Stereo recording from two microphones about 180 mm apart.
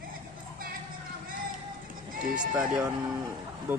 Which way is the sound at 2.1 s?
50° right (ahead or behind).